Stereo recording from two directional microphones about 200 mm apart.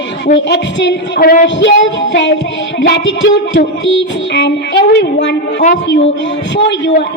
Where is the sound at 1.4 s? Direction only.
65° left (ahead or behind).